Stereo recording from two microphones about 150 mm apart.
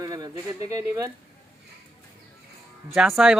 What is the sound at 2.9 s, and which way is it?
Speech, 5° right (ahead or behind).